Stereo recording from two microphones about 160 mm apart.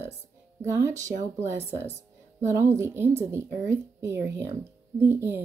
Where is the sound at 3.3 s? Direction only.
15° right (ahead or behind).